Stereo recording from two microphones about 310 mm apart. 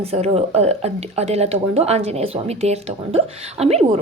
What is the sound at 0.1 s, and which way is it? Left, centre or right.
Speech, centre.